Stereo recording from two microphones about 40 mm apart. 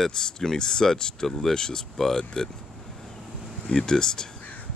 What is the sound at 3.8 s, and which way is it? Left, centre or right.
Speech, centre.